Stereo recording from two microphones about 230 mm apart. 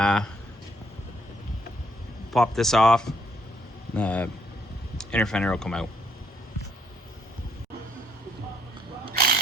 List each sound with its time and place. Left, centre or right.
0.0 s speech: centre
2.3 s speech: centre
9.1 s a sound: right